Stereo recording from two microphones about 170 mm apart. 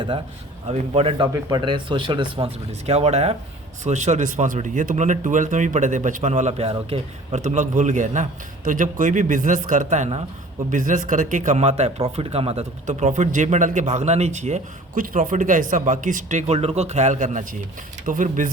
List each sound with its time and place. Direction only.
0.7 s a man's voice: 35° right (ahead or behind)
1.3 s speech: 25° right (ahead or behind); by 18.5 s 50° right (ahead or behind)